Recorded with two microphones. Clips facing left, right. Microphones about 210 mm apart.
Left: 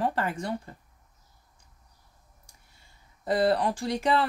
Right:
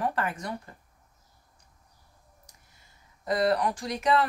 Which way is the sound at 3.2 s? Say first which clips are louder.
Left 1 dB; 30° left (ahead or behind).